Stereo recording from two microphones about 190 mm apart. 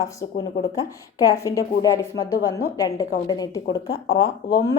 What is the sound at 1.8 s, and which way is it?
Female singing, 20° left (ahead or behind).